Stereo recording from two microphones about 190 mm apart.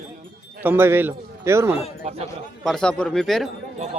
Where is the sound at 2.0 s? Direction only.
35° right (ahead or behind).